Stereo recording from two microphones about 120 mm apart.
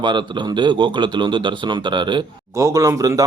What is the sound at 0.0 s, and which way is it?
Speech, 40° right (ahead or behind).